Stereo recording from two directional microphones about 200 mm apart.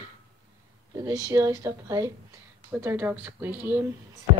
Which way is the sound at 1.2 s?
15° right (ahead or behind).